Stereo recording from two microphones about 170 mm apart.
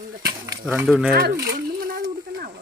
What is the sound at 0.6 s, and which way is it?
Speech, 5° right (ahead or behind).